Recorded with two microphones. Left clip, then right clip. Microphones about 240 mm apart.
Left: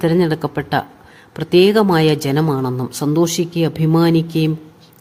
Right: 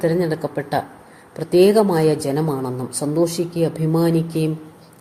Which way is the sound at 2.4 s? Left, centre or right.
Left.